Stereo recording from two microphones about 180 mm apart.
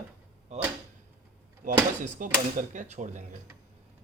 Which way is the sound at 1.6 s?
50° right (ahead or behind).